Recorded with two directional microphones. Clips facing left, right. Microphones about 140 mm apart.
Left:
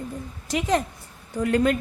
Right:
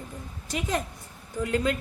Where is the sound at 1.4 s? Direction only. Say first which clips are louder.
Left 5 dB; 60° left (ahead or behind).